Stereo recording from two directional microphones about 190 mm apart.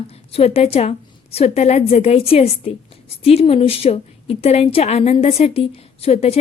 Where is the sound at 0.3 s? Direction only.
30° left (ahead or behind).